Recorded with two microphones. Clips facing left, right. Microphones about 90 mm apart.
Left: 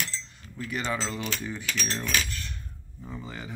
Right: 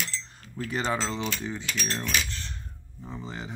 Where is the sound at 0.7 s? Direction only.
30° right (ahead or behind).